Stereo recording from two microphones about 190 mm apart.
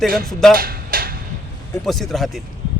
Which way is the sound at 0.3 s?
Centre (ahead or behind).